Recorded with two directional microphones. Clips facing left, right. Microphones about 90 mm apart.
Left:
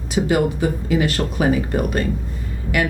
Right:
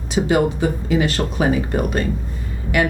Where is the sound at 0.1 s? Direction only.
25° right (ahead or behind).